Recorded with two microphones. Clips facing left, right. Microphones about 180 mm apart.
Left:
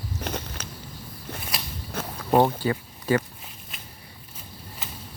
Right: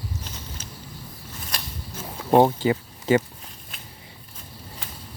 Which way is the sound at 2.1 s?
20° right (ahead or behind).